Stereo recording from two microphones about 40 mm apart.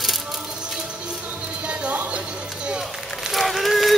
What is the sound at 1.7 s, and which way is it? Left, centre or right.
Music, right.